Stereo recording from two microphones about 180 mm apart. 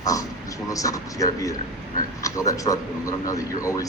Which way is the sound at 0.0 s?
20° left (ahead or behind).